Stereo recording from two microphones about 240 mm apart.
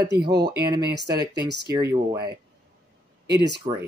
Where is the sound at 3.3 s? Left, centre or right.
Right.